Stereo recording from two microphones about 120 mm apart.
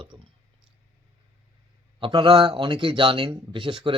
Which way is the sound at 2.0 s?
40° right (ahead or behind).